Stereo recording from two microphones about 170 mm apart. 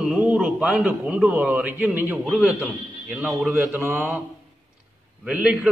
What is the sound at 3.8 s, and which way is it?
Speech, 10° right (ahead or behind).